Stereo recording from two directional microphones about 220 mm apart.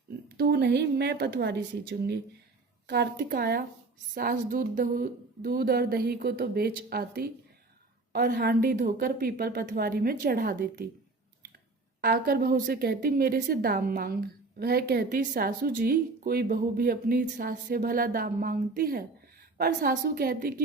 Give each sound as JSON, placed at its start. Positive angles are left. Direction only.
{"t": 0.3, "sound": "speech", "side_deg": -50}
{"t": 2.8, "sound": "speech", "side_deg": -45}
{"t": 11.9, "sound": "a woman's voice", "side_deg": -45}